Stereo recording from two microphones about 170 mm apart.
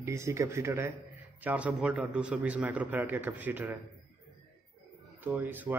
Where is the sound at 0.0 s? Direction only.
15° right (ahead or behind).